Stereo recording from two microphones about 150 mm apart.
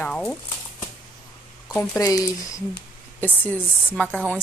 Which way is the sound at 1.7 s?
15° left (ahead or behind).